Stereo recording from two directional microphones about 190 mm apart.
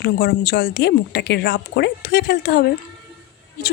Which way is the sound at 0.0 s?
60° left (ahead or behind).